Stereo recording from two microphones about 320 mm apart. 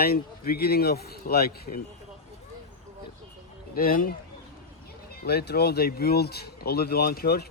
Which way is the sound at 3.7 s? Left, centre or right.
Left.